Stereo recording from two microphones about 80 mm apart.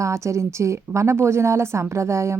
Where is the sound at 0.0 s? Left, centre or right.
Right.